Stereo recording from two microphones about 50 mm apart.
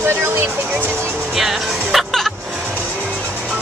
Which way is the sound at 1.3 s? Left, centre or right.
Centre.